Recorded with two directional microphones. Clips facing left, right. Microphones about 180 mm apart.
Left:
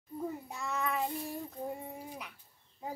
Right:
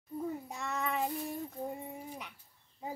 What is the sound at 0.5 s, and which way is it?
Child singing, centre (ahead or behind).